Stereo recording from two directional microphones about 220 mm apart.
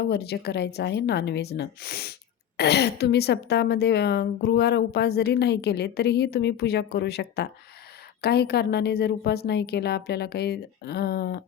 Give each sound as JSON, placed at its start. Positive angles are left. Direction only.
{"t": 0.0, "sound": "a woman's voice", "side_deg": 45}